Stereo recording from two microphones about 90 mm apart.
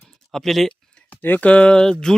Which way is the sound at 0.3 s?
Centre (ahead or behind).